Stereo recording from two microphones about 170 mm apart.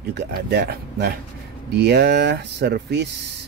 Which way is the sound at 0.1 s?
70° right (ahead or behind).